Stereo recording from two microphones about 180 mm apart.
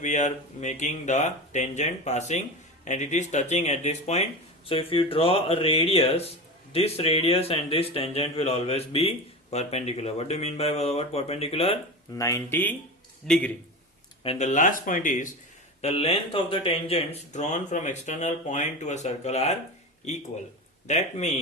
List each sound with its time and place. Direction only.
0.0 s speech: 40° left (ahead or behind)
12.1 s a man's voice: 15° left (ahead or behind)
14.3 s speech: 40° left (ahead or behind)
15.8 s speech: 35° left (ahead or behind)
20.8 s speech: 40° left (ahead or behind)